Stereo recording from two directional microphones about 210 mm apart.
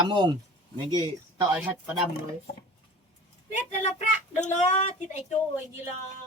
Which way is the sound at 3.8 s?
35° left (ahead or behind).